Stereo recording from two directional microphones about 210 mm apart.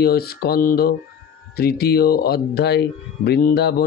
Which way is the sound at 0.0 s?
45° left (ahead or behind).